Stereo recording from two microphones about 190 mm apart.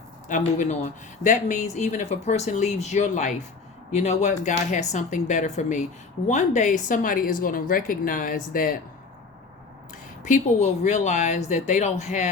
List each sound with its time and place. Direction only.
0.3 s a woman's voice: 40° left (ahead or behind)
10.2 s speech: 40° left (ahead or behind)